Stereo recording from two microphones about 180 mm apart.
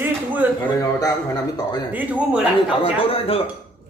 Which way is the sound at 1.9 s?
10° right (ahead or behind).